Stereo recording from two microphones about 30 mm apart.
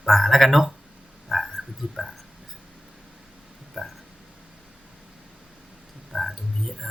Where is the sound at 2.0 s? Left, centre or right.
Right.